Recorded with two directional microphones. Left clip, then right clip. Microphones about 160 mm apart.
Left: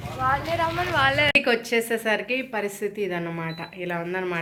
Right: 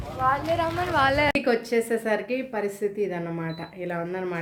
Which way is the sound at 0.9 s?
90° right.